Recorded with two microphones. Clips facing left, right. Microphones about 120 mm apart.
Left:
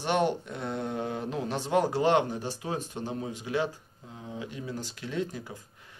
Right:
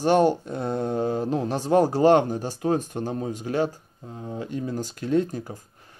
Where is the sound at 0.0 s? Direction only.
40° right (ahead or behind).